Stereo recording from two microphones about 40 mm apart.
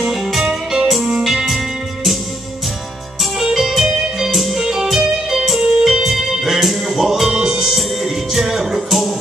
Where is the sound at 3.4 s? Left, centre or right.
Centre.